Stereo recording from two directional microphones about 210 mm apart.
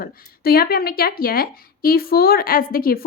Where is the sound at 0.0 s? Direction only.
45° left (ahead or behind).